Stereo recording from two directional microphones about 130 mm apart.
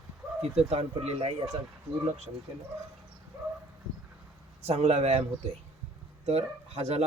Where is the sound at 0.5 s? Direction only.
55° right (ahead or behind).